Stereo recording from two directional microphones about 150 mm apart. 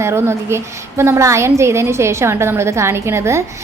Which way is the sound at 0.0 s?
15° right (ahead or behind).